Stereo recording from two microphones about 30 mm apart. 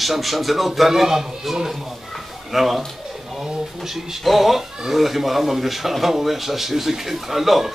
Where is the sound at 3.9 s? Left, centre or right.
Centre.